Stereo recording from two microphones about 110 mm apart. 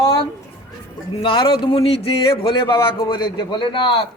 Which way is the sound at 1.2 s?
50° left (ahead or behind).